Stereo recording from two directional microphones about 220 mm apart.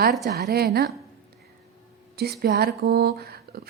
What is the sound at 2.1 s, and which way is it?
A woman's voice, 45° right (ahead or behind).